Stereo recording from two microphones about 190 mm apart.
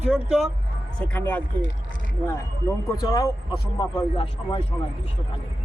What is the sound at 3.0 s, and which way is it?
A man's voice, 20° left (ahead or behind).